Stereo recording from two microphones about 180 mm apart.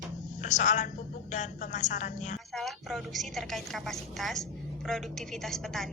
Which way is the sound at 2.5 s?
Centre (ahead or behind).